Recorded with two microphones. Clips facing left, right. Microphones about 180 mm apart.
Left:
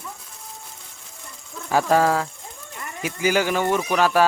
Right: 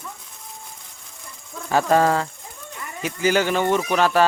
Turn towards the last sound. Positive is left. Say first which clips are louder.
# right 1 dB
turn(degrees=5)  # may be behind; listen again after turning